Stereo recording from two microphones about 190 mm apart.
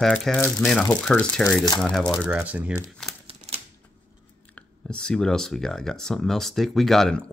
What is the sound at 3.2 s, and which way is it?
Typewriter, 30° right (ahead or behind).